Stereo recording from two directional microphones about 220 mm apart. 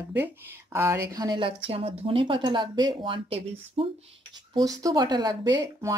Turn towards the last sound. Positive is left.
turn(degrees=-15)  # may be behind; listen again after turning